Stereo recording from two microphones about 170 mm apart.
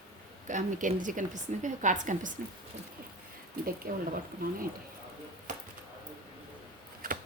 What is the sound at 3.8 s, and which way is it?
Speech, 55° right (ahead or behind).